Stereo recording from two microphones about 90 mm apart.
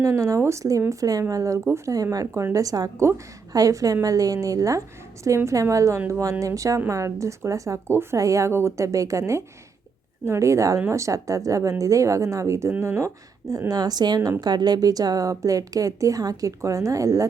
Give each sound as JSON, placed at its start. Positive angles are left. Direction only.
{"t": 0.0, "sound": "speech", "side_deg": -35}
{"t": 13.5, "sound": "speech", "side_deg": -40}